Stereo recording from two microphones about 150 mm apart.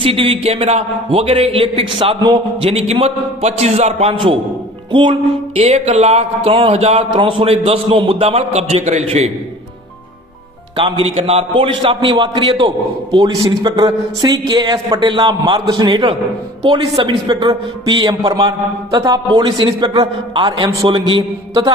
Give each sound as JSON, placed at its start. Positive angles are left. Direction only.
{"t": 0.0, "sound": "a man's voice", "side_deg": -40}
{"t": 5.5, "sound": "speech", "side_deg": -45}
{"t": 10.8, "sound": "a man's voice", "side_deg": -35}